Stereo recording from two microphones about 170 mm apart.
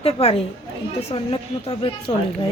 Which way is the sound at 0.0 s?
35° left (ahead or behind).